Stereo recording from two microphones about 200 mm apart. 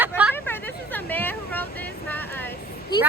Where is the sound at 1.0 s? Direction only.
10° left (ahead or behind).